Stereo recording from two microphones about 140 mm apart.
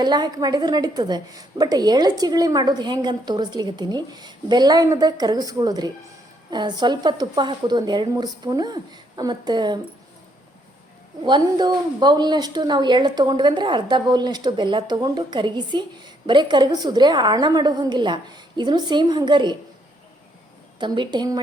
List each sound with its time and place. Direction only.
0.0 s a woman's voice: 30° right (ahead or behind)
11.2 s a woman's voice: 35° right (ahead or behind)
20.7 s a woman's voice: 35° right (ahead or behind)